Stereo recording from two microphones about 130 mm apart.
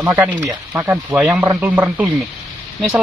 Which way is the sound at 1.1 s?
5° right (ahead or behind).